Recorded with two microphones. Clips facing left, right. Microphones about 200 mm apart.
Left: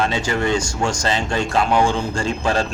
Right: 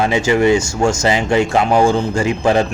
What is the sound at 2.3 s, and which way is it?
Speech, 20° right (ahead or behind).